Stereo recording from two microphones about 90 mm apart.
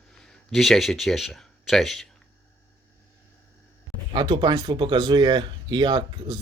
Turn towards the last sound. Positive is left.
turn(degrees=-50)  # may be behind; listen again after turning